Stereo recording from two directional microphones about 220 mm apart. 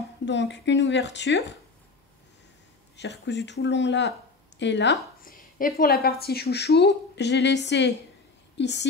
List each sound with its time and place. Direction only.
0.2 s speech: 55° left (ahead or behind)
3.0 s speech: 50° left (ahead or behind)
5.2 s speech: 40° left (ahead or behind)